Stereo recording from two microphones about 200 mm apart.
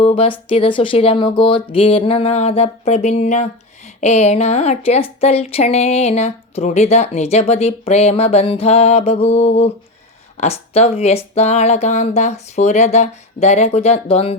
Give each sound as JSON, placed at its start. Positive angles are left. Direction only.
{"t": 0.0, "sound": "speech", "side_deg": 30}